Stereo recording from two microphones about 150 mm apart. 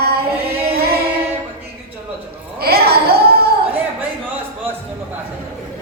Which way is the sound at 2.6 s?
90° right.